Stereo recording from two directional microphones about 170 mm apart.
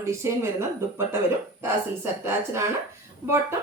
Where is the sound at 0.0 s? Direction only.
15° right (ahead or behind).